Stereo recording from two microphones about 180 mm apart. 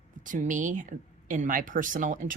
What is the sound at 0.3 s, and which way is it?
Speech, 45° right (ahead or behind).